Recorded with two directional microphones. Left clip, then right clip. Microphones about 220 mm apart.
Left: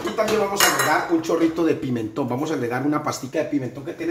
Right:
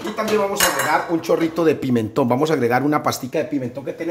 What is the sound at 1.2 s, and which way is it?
Speech, 50° right (ahead or behind).